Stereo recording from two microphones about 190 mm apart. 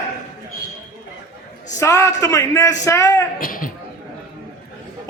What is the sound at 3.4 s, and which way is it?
Speech, 45° left (ahead or behind).